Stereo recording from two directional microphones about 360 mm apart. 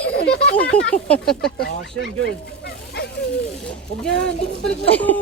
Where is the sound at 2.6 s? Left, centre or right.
Left.